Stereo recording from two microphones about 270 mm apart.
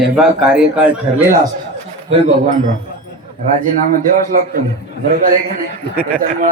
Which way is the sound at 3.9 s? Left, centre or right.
Right.